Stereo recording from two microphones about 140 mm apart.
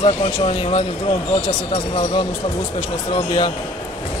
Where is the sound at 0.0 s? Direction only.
45° left (ahead or behind).